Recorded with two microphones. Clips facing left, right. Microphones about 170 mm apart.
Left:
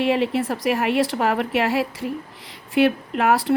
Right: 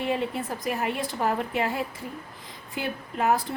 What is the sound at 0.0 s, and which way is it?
Speech, 90° left.